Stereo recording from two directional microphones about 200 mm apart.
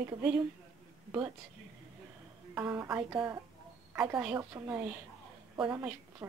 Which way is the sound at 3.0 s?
20° right (ahead or behind).